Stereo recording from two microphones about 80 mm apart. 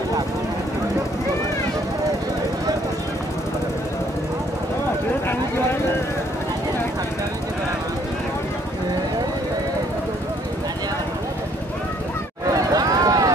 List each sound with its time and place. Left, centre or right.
12.5 s run: right